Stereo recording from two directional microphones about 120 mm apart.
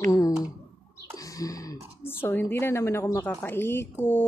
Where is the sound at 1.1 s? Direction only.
30° left (ahead or behind).